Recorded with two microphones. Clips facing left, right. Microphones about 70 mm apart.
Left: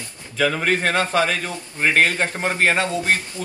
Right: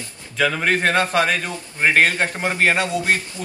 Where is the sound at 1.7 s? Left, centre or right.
Right.